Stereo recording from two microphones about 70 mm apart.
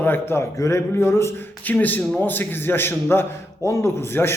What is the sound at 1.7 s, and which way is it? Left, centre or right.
Speech, left.